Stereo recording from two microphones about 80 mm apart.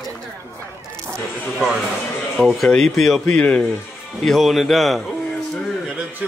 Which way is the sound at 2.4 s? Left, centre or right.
Centre.